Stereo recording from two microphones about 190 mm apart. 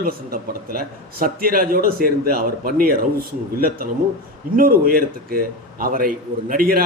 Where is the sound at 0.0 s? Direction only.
50° right (ahead or behind).